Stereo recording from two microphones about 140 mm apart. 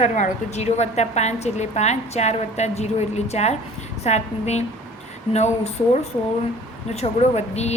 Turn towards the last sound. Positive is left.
turn(degrees=50)  # may be behind; listen again after turning